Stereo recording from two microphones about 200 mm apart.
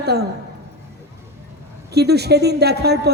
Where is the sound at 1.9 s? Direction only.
55° right (ahead or behind).